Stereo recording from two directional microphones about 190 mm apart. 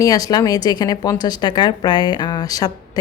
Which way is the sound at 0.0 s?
20° left (ahead or behind).